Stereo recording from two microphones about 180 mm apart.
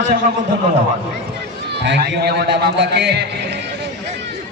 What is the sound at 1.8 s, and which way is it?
A man's voice, 70° right (ahead or behind).